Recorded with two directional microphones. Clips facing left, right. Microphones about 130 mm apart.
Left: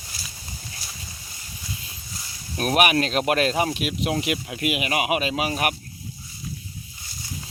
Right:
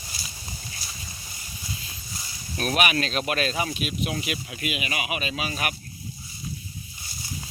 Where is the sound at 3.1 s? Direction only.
60° left (ahead or behind); by 4.1 s 75° left (ahead or behind).